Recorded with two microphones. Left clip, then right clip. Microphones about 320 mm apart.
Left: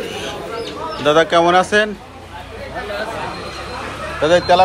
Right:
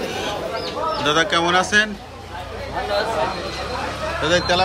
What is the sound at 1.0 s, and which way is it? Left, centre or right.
Speech, centre.